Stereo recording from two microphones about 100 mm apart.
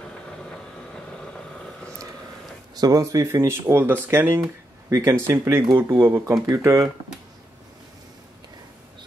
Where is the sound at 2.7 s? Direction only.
40° right (ahead or behind).